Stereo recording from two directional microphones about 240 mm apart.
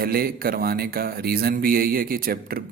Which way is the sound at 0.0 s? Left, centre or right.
Right.